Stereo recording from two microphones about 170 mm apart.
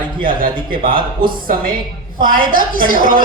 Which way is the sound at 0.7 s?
30° right (ahead or behind).